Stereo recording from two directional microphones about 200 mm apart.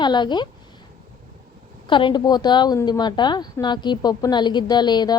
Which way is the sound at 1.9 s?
25° left (ahead or behind).